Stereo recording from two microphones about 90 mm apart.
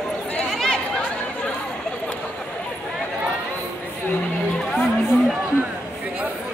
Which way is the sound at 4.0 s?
20° left (ahead or behind).